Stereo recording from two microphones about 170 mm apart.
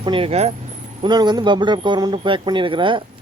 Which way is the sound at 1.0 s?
25° right (ahead or behind).